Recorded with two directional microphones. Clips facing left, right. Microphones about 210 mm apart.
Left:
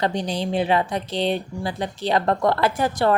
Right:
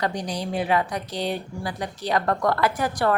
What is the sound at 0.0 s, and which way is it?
A woman's voice, 25° left (ahead or behind).